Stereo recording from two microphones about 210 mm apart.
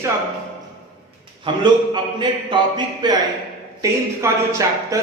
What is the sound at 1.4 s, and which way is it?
A man's voice, 20° right (ahead or behind).